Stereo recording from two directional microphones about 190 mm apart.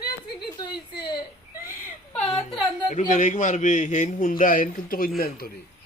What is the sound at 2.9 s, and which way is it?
A man's voice, 40° left (ahead or behind).